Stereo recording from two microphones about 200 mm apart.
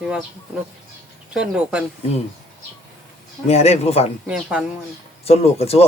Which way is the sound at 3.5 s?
30° left (ahead or behind).